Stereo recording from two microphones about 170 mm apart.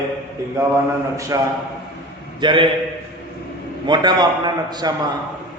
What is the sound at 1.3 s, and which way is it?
A man's voice, 20° right (ahead or behind).